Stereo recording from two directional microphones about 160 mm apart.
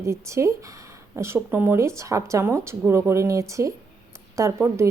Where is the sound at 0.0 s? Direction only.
20° right (ahead or behind).